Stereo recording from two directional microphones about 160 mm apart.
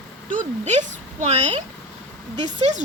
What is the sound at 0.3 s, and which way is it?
Speech, 50° right (ahead or behind).